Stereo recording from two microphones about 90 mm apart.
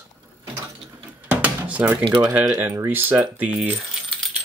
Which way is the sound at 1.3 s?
15° right (ahead or behind).